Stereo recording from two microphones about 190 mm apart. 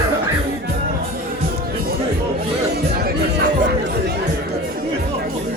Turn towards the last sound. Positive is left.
turn(degrees=-55)  # may be behind; listen again after turning